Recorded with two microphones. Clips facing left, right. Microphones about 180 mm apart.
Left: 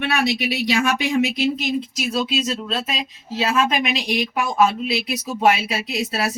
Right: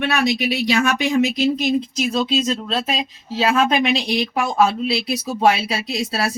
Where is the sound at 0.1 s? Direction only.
45° right (ahead or behind).